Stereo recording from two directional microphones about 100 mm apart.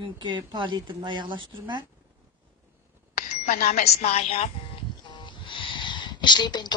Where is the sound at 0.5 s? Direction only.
50° right (ahead or behind).